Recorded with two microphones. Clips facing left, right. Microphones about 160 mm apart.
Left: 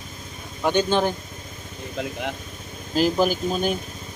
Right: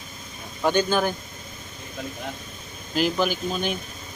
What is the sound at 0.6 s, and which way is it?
Speech, 20° left (ahead or behind).